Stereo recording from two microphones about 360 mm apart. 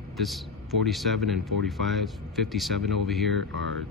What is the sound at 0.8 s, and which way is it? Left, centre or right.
Speech, centre.